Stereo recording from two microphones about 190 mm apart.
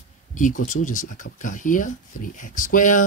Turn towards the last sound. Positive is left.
turn(degrees=45)  # may be behind; listen again after turning